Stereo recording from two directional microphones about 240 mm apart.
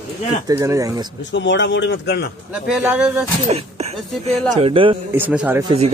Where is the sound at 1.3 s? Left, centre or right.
Left.